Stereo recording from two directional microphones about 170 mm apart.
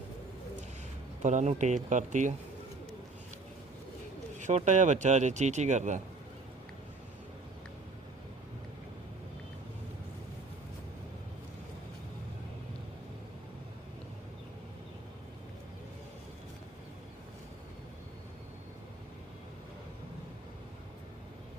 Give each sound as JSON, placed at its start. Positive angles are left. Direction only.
{"t": 1.2, "sound": "speech", "side_deg": -45}
{"t": 4.4, "sound": "speech", "side_deg": -45}